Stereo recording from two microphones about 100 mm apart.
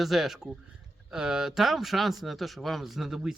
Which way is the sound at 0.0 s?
5° right (ahead or behind).